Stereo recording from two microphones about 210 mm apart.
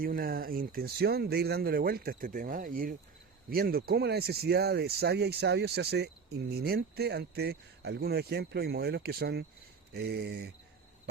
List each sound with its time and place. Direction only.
0.0 s speech: 45° right (ahead or behind)